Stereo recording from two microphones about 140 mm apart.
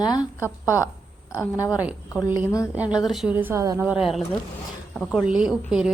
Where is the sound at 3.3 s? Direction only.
15° right (ahead or behind).